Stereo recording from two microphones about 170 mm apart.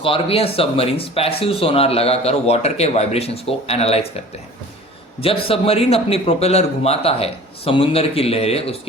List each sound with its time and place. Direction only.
0.0 s speech: 35° left (ahead or behind)
5.2 s speech: 35° left (ahead or behind)